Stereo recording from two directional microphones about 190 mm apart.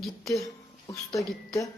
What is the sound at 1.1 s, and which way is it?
Speech, 15° left (ahead or behind).